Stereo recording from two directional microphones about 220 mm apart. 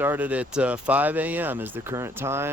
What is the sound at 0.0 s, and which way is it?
Speech, 10° right (ahead or behind).